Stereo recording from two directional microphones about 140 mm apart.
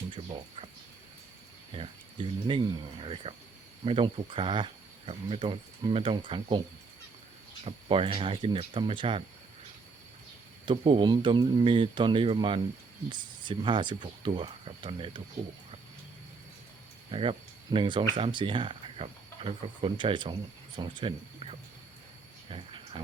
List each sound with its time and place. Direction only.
0.1 s a sound: 40° right (ahead or behind)
1.7 s speech: 40° right (ahead or behind)
7.6 s speech: 40° right (ahead or behind)
10.7 s speech: 35° right (ahead or behind)
17.1 s speech: 40° right (ahead or behind)
22.4 s a sound: 40° right (ahead or behind)